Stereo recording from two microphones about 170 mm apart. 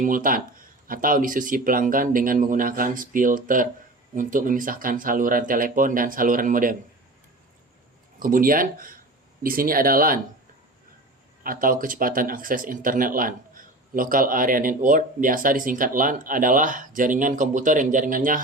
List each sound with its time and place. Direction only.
0.0 s speech: 55° right (ahead or behind)
8.2 s speech: 55° right (ahead or behind)
11.4 s speech: 55° right (ahead or behind)